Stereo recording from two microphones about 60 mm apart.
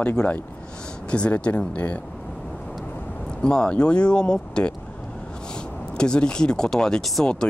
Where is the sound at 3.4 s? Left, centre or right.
Centre.